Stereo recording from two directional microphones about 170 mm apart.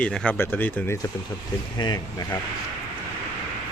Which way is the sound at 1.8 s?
25° left (ahead or behind).